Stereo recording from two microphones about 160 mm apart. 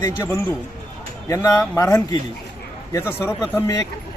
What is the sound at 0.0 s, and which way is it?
A man's voice, 15° left (ahead or behind).